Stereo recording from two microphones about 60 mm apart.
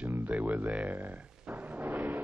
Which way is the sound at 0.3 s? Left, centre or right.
Right.